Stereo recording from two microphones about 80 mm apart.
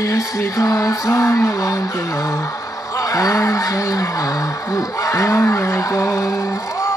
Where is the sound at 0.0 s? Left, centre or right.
Left.